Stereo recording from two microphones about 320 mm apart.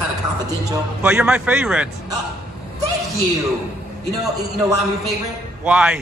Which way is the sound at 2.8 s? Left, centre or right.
Centre.